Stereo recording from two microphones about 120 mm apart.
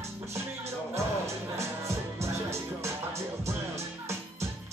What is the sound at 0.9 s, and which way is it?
Music, 25° right (ahead or behind).